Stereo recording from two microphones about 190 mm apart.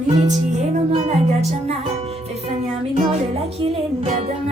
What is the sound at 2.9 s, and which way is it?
Music, 35° right (ahead or behind).